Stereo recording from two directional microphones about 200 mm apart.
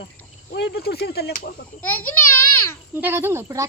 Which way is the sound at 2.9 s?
10° right (ahead or behind).